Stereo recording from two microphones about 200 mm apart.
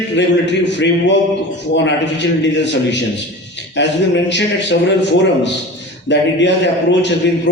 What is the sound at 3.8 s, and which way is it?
Speech, 60° left (ahead or behind).